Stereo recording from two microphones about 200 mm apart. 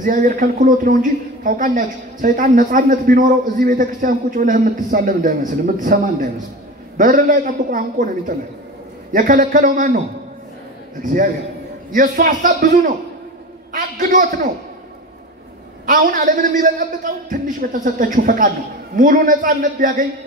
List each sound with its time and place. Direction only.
0.0 s a man's voice: 40° right (ahead or behind)
11.0 s a man's voice: 40° right (ahead or behind)
15.8 s a man's voice: 45° right (ahead or behind)